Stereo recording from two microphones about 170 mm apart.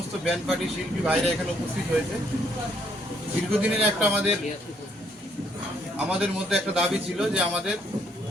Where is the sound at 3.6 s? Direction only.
5° right (ahead or behind).